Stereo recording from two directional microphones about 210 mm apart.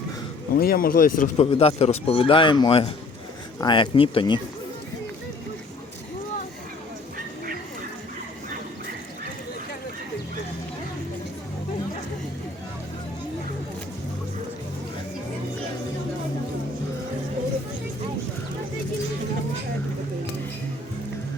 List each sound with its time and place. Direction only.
0.6 s speech: 45° left (ahead or behind)
1.4 s speech: 25° left (ahead or behind)